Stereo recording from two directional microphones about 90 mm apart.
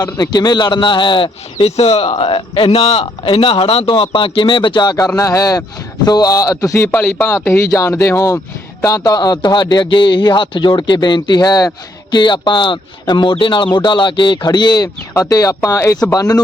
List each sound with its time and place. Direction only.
0.0 s a man's voice: 45° left (ahead or behind); by 2.7 s 70° left (ahead or behind)
3.2 s speech: 80° left
4.2 s speech: 65° left (ahead or behind); by 6.9 s 30° left (ahead or behind)
6.9 s speech: 15° left (ahead or behind)
7.3 s a man's voice: 30° left (ahead or behind)
12.1 s a man's voice: 55° left (ahead or behind)
15.1 s speech: 40° left (ahead or behind)